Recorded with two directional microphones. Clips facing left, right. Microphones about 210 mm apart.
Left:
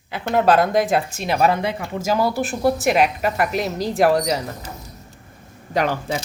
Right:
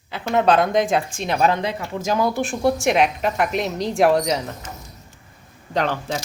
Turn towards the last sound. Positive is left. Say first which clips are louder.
# left 1 dB
turn(degrees=10)  # may be behind; listen again after turning